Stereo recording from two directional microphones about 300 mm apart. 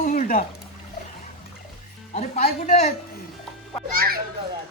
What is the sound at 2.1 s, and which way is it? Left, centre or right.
Speech, left.